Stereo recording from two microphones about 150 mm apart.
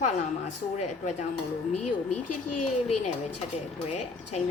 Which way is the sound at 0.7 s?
50° left (ahead or behind).